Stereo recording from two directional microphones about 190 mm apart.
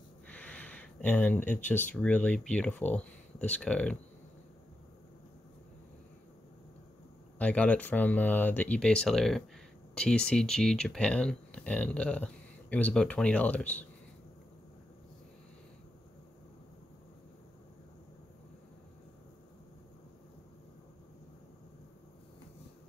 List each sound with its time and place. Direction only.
0.3 s speech: 5° left (ahead or behind)
7.3 s speech: 5° left (ahead or behind)